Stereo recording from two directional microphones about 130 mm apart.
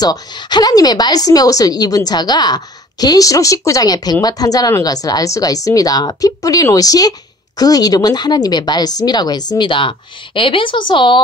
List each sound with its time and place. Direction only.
0.0 s speech: 30° left (ahead or behind)